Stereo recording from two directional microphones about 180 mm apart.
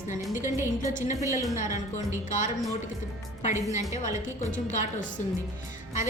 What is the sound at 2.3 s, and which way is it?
Speech, 45° left (ahead or behind).